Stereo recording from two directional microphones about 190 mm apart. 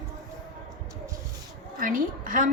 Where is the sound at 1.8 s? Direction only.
45° right (ahead or behind).